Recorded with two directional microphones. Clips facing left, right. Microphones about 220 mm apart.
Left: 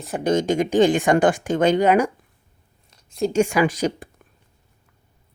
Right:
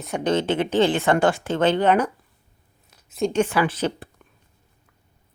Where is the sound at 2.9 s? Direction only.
Centre (ahead or behind).